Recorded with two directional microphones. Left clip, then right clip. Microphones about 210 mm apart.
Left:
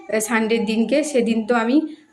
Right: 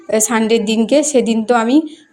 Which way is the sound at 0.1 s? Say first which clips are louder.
Right 6 dB; 30° right (ahead or behind).